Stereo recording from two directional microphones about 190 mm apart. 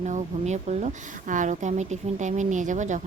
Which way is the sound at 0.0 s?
40° right (ahead or behind).